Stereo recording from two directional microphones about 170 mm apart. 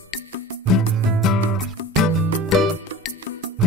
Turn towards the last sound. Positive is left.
turn(degrees=0)  # may be behind; listen again after turning